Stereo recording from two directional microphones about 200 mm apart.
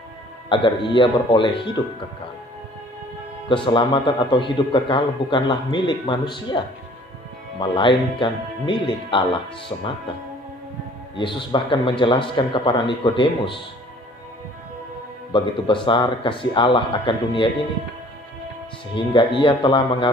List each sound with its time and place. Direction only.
0.5 s speech: 25° left (ahead or behind)
3.5 s speech: 25° left (ahead or behind)
7.6 s speech: 25° left (ahead or behind)
11.2 s speech: 25° left (ahead or behind)
15.3 s speech: 25° left (ahead or behind)
18.9 s speech: 25° left (ahead or behind)